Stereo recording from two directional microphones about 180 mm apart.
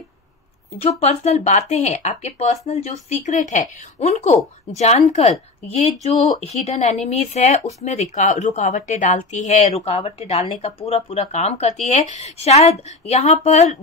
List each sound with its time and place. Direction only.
0.7 s speech: 35° left (ahead or behind)